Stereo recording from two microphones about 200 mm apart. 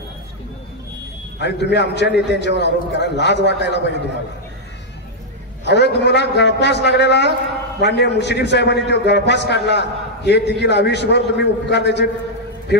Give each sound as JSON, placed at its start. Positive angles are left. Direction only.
{"t": 1.4, "sound": "a man's voice", "side_deg": 60}
{"t": 5.7, "sound": "a man's voice", "side_deg": 60}